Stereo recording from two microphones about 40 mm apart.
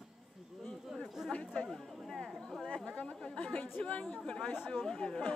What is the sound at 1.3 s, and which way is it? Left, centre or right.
Chatter, left.